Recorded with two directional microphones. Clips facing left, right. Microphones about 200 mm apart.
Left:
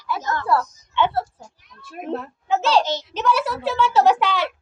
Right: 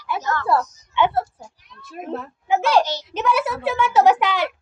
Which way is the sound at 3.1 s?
10° right (ahead or behind).